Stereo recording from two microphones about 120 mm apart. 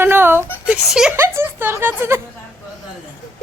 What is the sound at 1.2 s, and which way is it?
Speech, 20° right (ahead or behind).